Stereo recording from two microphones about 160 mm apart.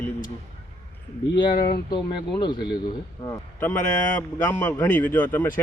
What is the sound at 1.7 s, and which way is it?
Speech, 25° left (ahead or behind).